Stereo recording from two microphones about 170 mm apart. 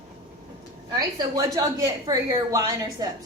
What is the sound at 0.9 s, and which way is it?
A woman's voice, 20° right (ahead or behind).